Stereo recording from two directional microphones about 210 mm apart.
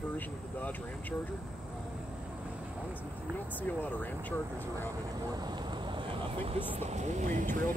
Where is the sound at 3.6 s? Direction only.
10° left (ahead or behind).